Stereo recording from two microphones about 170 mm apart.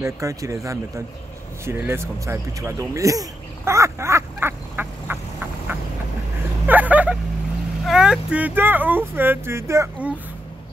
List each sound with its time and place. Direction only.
0.0 s speech: 20° right (ahead or behind)
1.7 s a sound: 15° right (ahead or behind)
6.7 s vehicle: 10° right (ahead or behind)
7.8 s speech: 5° right (ahead or behind)